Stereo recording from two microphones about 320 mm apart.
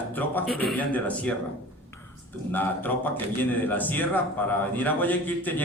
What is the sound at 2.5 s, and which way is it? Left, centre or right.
A man's voice, centre.